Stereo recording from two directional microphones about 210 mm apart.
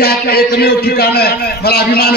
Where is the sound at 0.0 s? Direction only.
45° left (ahead or behind).